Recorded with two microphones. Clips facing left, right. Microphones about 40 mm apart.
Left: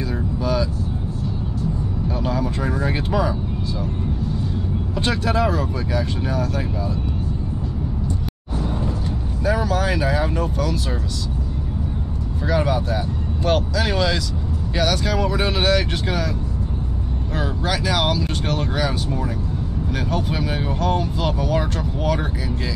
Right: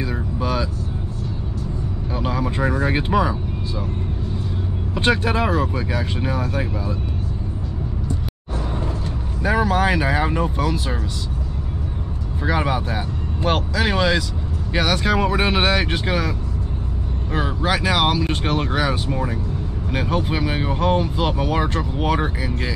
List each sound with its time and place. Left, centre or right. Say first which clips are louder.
0.4 s vehicle: left 1 dB; right
2.2 s speech: right 3 dB; right
4.9 s speech: right 2 dB; right
9.4 s speech: right 3 dB; right
12.4 s speech: left 1 dB; right